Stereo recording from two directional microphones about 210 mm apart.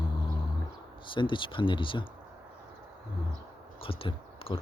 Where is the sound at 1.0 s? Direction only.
25° left (ahead or behind).